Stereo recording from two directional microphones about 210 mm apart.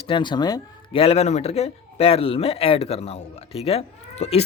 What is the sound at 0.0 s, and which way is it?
Speech, 25° left (ahead or behind).